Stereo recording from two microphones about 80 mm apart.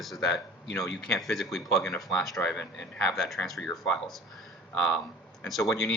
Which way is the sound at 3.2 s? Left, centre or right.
Centre.